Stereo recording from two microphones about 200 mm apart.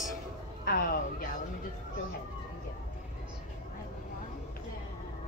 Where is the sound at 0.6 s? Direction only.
45° left (ahead or behind).